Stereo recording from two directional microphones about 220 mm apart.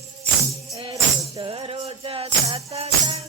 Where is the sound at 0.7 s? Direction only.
20° right (ahead or behind).